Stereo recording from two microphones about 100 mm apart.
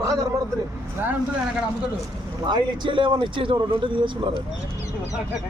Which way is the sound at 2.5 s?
55° right (ahead or behind).